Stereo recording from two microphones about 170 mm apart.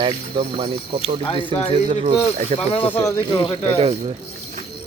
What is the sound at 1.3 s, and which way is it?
Speech, 30° left (ahead or behind).